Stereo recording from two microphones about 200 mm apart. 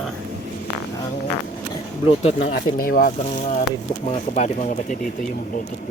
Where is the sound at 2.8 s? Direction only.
50° left (ahead or behind).